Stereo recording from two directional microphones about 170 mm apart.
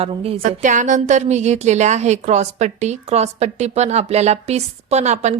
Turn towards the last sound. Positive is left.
turn(degrees=-40)  # may be behind; listen again after turning